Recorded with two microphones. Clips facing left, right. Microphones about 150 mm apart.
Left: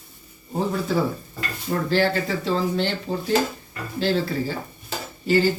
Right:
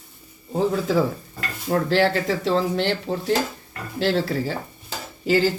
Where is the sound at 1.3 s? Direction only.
85° right.